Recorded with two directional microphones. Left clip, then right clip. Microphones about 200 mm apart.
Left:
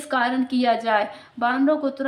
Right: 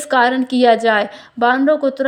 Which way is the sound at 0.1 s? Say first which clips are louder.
Right 8 dB; 40° right (ahead or behind).